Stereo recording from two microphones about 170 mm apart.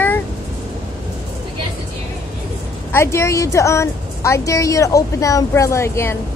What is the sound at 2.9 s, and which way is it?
A woman's voice, 15° left (ahead or behind).